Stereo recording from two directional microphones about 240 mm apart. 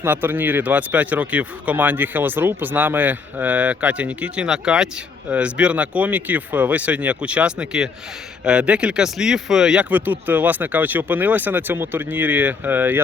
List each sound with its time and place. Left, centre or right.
0.0 s speech: centre